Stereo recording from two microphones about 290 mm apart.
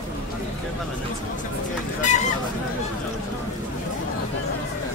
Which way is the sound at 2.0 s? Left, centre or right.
Left.